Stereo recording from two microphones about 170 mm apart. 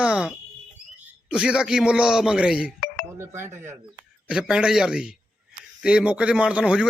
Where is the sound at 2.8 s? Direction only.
65° left (ahead or behind).